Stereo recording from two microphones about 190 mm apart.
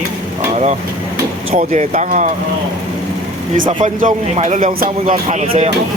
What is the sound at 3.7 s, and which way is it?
A man's voice, 30° right (ahead or behind).